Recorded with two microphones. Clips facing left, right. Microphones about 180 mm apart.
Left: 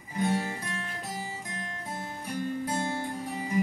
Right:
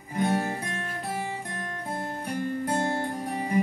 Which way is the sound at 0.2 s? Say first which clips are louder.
Right 2 dB; 55° right (ahead or behind).